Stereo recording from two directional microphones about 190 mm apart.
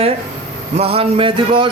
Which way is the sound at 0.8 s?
30° right (ahead or behind).